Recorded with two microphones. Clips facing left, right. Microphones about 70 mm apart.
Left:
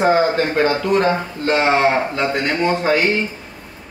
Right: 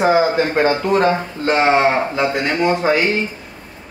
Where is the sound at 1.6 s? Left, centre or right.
Centre.